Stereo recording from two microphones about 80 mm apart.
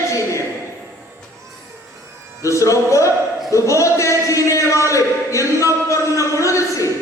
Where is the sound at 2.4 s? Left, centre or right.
Left.